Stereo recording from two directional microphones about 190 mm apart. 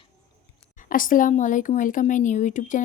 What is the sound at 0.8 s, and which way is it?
Speech, 45° left (ahead or behind).